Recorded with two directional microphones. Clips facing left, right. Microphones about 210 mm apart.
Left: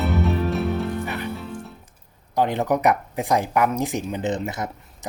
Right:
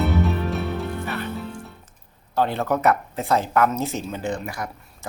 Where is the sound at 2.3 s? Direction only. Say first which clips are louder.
Left 1 dB; 15° left (ahead or behind).